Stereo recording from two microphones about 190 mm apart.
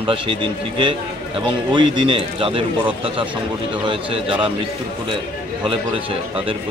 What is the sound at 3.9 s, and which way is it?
Speech, 25° right (ahead or behind).